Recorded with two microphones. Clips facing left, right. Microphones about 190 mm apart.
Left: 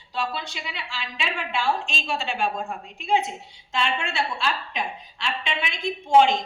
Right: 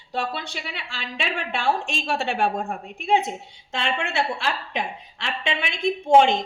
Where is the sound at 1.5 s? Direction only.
55° right (ahead or behind).